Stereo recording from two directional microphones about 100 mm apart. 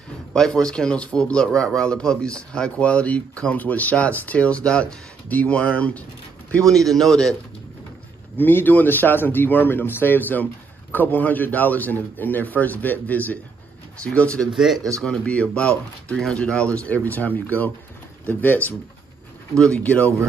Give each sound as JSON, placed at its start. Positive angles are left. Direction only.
{"t": 0.3, "sound": "speech", "side_deg": 5}
{"t": 6.9, "sound": "speech", "side_deg": 5}
{"t": 8.4, "sound": "speech", "side_deg": 20}
{"t": 14.5, "sound": "speech", "side_deg": -5}
{"t": 14.9, "sound": "speech", "side_deg": 10}
{"t": 19.5, "sound": "speech", "side_deg": 5}